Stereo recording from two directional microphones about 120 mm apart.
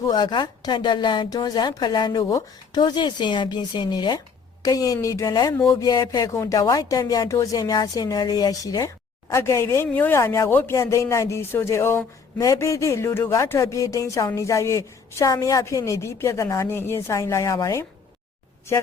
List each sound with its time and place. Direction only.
0.0 s a woman's voice: 35° left (ahead or behind)